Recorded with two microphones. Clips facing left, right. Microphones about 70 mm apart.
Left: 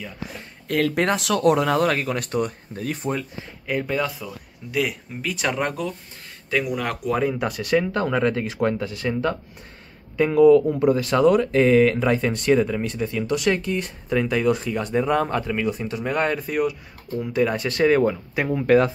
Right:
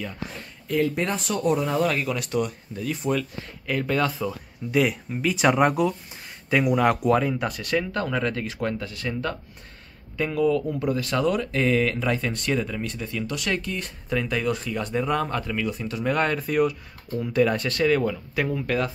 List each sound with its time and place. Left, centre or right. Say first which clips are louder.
0.7 s speech: left 3 dB; left
1.8 s speech: left 2 dB; left
3.6 s speech: even; centre
7.1 s speech: right 1 dB; centre; by 18.9 s left